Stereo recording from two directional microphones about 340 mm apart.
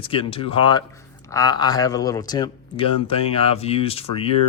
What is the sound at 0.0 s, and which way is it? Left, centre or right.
Speech, centre.